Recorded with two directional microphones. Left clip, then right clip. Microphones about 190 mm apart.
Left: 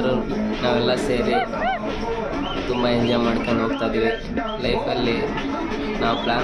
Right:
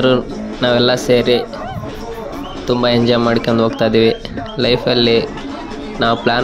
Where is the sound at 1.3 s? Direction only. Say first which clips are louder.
Right 4 dB; 5° right (ahead or behind).